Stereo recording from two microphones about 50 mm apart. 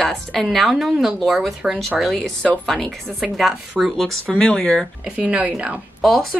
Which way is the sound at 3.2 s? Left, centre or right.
Centre.